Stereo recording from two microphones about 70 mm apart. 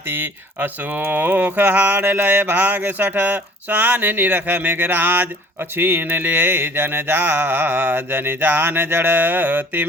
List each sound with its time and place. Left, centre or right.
0.1 s speech: right